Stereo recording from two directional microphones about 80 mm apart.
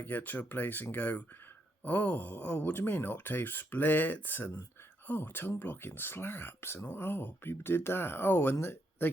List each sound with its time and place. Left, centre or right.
0.0 s speech: left